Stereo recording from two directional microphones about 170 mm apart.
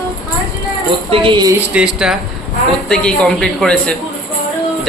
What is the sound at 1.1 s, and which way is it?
Speech, 30° right (ahead or behind).